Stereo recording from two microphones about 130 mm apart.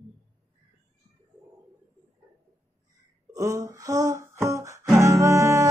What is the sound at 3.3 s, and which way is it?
Music, 25° right (ahead or behind).